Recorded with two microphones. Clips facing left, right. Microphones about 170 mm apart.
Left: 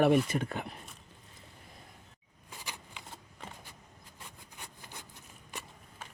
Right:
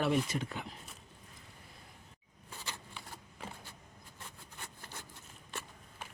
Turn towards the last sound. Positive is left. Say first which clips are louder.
# even
turn(degrees=15)  # may be behind; listen again after turning